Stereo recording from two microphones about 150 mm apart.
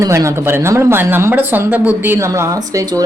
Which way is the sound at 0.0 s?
20° right (ahead or behind).